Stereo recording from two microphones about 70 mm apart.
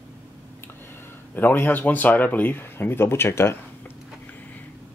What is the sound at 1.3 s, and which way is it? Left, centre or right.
Speech, left.